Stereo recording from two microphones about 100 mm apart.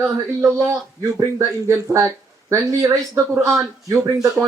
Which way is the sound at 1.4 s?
30° right (ahead or behind).